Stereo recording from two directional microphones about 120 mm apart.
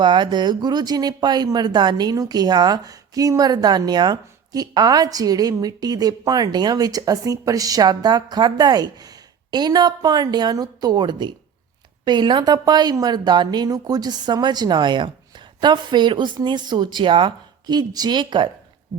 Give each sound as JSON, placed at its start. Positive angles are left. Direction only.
{"t": 0.0, "sound": "speech", "side_deg": -40}